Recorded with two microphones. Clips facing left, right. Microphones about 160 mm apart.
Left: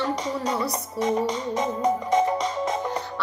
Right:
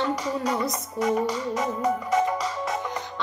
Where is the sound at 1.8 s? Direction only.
35° left (ahead or behind).